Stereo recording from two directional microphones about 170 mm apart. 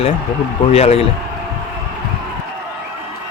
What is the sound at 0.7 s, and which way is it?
Speech, 40° left (ahead or behind).